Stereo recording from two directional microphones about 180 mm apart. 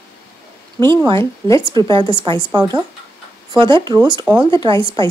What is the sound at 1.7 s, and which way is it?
Speech, 25° right (ahead or behind).